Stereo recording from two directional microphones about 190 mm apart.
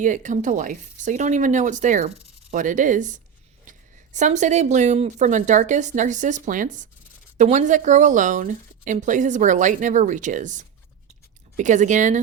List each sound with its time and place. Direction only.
0.0 s speech: 40° right (ahead or behind)